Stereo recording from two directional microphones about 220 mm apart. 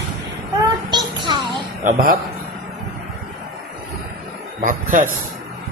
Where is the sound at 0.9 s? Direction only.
20° right (ahead or behind).